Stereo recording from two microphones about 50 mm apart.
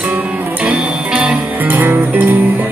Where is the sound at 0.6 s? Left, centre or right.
Right.